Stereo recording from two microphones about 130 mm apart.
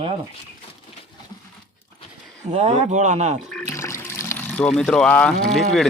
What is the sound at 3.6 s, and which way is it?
Water, 20° left (ahead or behind).